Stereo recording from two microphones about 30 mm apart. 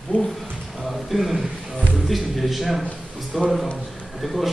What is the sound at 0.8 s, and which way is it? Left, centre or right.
A man's voice, centre.